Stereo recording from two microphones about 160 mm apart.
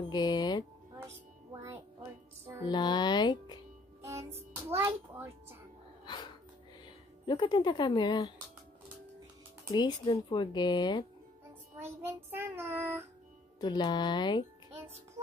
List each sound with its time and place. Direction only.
0.1 s a sound: 25° left (ahead or behind)
0.9 s music: 15° right (ahead or behind)
2.7 s music: 25° left (ahead or behind)
4.0 s music: 20° right (ahead or behind)
4.6 s a sound: 15° right (ahead or behind)
6.0 s music: 25° left (ahead or behind)
7.2 s speech: 25° left (ahead or behind)
9.7 s speech: 30° left (ahead or behind)
11.7 s child singing: 15° right (ahead or behind)
13.6 s speech: 25° left (ahead or behind)